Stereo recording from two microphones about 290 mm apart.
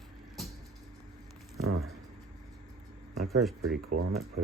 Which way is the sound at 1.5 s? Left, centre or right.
Right.